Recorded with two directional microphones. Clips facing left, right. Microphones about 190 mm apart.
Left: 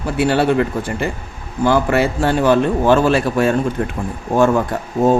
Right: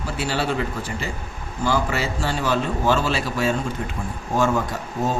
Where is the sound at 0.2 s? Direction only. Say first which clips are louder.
Left 10 dB; 60° left (ahead or behind).